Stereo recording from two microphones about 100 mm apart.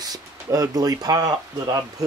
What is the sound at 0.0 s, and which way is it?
Speech, 35° right (ahead or behind).